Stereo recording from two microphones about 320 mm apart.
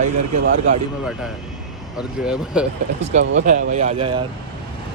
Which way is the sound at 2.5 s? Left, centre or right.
Centre.